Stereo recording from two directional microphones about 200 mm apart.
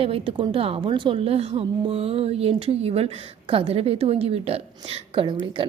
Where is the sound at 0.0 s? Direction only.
25° right (ahead or behind).